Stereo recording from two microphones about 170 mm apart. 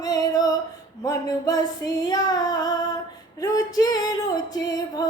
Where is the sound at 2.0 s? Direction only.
20° left (ahead or behind).